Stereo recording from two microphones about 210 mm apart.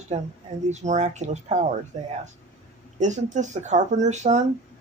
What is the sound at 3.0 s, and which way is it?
Speech, 35° right (ahead or behind).